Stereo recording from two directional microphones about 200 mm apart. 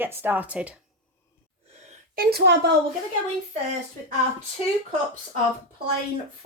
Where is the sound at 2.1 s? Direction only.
50° right (ahead or behind).